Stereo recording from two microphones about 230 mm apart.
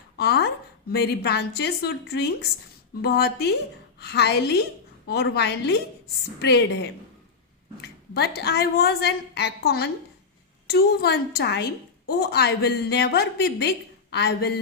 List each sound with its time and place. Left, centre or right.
0.2 s a woman's voice: left
8.1 s a woman's voice: left